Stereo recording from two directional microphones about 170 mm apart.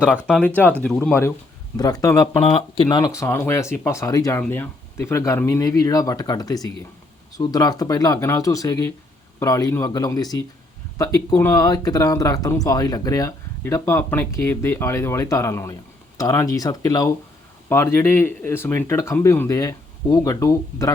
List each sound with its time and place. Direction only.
0.0 s speech: 5° right (ahead or behind)
0.4 s speech: 10° left (ahead or behind)
1.7 s speech: 20° left (ahead or behind)
2.4 s speech: 35° left (ahead or behind)
3.0 s speech: 15° left (ahead or behind)